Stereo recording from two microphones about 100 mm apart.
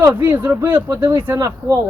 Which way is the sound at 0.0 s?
25° right (ahead or behind).